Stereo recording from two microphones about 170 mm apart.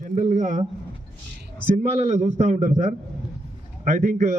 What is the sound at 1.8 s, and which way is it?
Speech, 40° right (ahead or behind).